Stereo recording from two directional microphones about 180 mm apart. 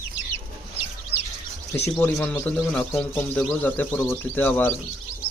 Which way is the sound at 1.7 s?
10° left (ahead or behind).